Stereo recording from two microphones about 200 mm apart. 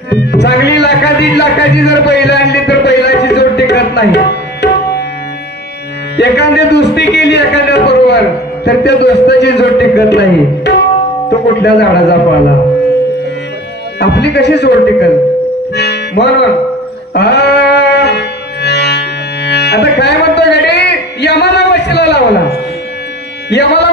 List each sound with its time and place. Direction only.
0.3 s music: 60° left (ahead or behind)
6.1 s a man's voice: 60° left (ahead or behind)
13.9 s a man's voice: 60° left (ahead or behind)
15.7 s music: 55° left (ahead or behind)
23.5 s a man's voice: 60° left (ahead or behind)